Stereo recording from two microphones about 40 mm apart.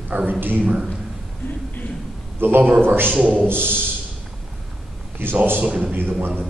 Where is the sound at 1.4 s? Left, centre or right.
Left.